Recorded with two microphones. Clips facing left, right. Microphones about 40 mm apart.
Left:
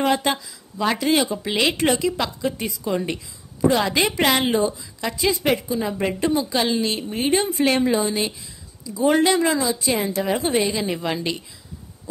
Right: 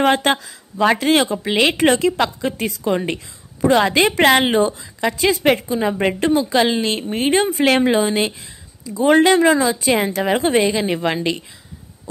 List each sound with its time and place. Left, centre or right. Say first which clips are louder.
0.0 s a woman's voice: right 5 dB; right
1.4 s a woman's voice: right 5 dB; right
2.5 s a woman's voice: right 5 dB; right
2.9 s a woman's voice: right 3 dB; right
7.6 s speech: right 4 dB; right
7.9 s a woman's voice: right 4 dB; right